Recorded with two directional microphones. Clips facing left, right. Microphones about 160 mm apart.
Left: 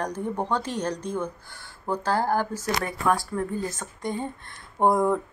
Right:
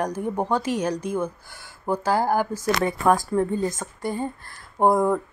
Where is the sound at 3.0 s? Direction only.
45° right (ahead or behind).